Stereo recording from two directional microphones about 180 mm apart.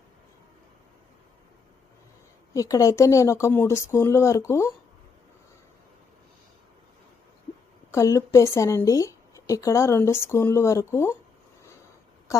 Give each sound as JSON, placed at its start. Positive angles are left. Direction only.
{"t": 2.5, "sound": "speech", "side_deg": 20}
{"t": 7.9, "sound": "speech", "side_deg": 15}